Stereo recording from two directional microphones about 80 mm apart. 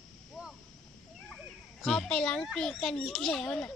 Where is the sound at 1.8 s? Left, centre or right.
Centre.